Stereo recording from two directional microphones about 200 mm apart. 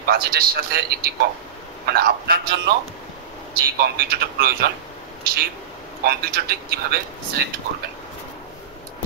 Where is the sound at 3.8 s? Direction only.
50° right (ahead or behind).